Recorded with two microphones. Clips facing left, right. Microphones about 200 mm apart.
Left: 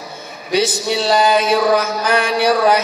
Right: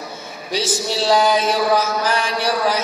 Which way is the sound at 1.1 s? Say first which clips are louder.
Left 2 dB; 60° left (ahead or behind).